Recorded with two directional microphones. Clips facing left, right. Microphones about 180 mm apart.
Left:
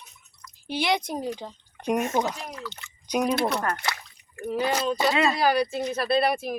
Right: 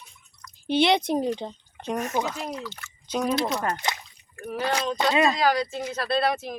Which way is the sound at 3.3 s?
55° left (ahead or behind).